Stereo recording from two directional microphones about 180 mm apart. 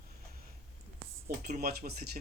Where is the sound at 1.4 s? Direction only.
55° right (ahead or behind).